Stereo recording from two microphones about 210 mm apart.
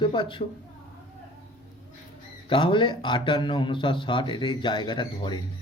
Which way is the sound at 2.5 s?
25° left (ahead or behind).